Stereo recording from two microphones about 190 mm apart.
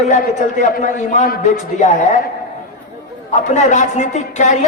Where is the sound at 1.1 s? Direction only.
40° left (ahead or behind).